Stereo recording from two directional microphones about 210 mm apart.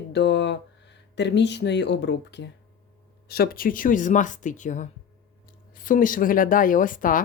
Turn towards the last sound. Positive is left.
turn(degrees=40)  # may be behind; listen again after turning